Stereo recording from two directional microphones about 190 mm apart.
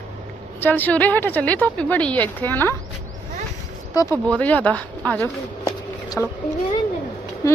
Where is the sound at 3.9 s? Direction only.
20° left (ahead or behind).